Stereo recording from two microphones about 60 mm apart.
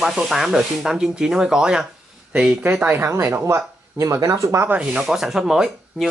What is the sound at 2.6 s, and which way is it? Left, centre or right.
Speech, right.